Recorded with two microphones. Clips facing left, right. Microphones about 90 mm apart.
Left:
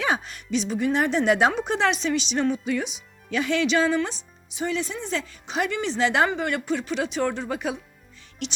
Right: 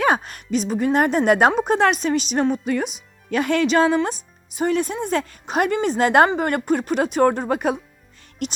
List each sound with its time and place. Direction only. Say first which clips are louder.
0.0 s speech: right 6 dB; 50° right (ahead or behind)